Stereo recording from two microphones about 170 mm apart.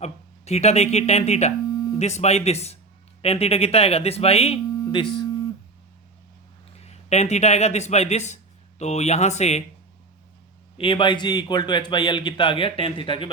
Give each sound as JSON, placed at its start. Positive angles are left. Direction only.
{"t": 0.0, "sound": "speech", "side_deg": 40}
{"t": 6.8, "sound": "speech", "side_deg": 40}
{"t": 10.8, "sound": "speech", "side_deg": 30}